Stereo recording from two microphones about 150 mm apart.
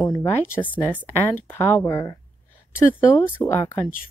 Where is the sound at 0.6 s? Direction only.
10° left (ahead or behind).